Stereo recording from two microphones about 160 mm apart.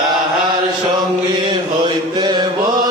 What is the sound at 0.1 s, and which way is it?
Chant, 25° right (ahead or behind).